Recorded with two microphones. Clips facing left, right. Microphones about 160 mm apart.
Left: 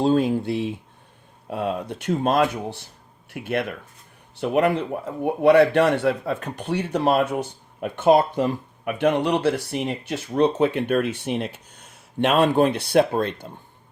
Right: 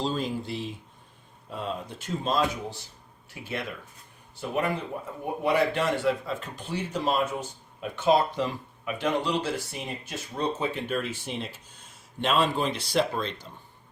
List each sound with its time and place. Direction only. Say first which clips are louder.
0.0 s a man's voice: left 10 dB; 60° left (ahead or behind)